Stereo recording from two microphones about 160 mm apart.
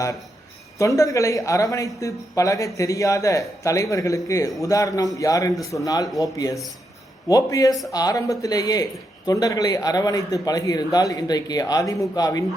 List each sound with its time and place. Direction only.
0.8 s speech: 20° left (ahead or behind)